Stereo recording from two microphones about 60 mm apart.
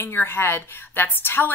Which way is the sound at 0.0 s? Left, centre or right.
Left.